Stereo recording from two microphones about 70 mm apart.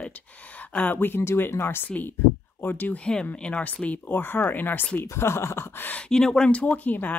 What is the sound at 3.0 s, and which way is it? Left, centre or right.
Speech, centre.